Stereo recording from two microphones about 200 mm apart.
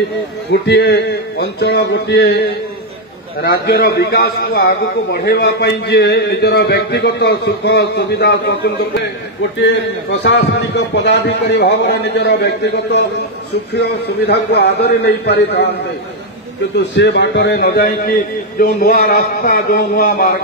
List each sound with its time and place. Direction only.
0.5 s a man's voice: 60° left (ahead or behind)
3.4 s a man's voice: 50° left (ahead or behind)
10.1 s a man's voice: 55° left (ahead or behind)
16.7 s a man's voice: 60° left (ahead or behind)